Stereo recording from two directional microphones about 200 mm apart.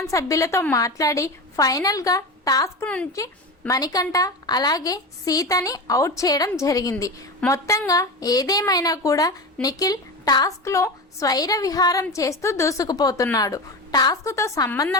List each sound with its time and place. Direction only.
0.0 s a woman's voice: 15° left (ahead or behind)
2.8 s a woman's voice: 5° left (ahead or behind)
3.7 s a woman's voice: 20° left (ahead or behind)